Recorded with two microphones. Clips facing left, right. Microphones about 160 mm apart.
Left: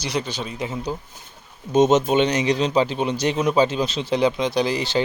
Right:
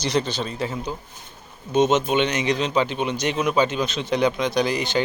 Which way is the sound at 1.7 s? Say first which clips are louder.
Left 3 dB; 40° left (ahead or behind).